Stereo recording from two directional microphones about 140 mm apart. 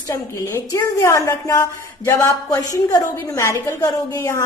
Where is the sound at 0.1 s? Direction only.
20° left (ahead or behind).